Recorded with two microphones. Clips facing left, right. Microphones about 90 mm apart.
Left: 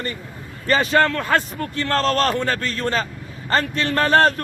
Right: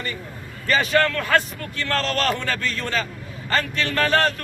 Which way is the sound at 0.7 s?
30° left (ahead or behind).